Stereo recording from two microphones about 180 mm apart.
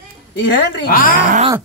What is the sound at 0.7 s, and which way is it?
Speech, 55° left (ahead or behind).